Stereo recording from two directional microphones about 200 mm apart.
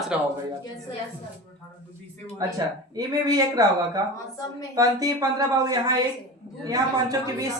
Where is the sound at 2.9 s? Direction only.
20° right (ahead or behind).